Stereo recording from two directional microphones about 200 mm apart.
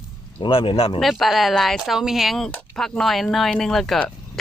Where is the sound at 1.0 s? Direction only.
Centre (ahead or behind).